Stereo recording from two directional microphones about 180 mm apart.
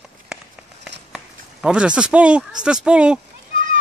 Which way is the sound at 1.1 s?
5° right (ahead or behind).